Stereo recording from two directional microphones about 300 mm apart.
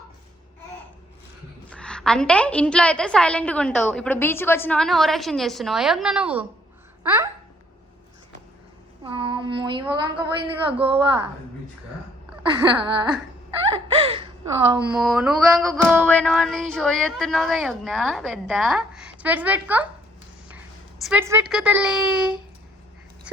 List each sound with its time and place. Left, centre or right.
1.7 s music: centre
7.0 s speech: centre
9.0 s a woman's voice: centre
12.5 s a woman's voice: centre
13.9 s whimper: centre
14.7 s music: centre
21.0 s a woman's voice: centre
21.5 s music: centre